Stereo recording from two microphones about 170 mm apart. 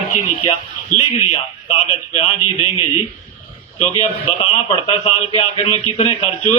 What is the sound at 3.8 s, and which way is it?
A man's voice, 35° left (ahead or behind).